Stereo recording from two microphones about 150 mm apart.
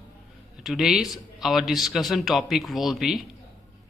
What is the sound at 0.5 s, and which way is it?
A man's voice, 5° right (ahead or behind).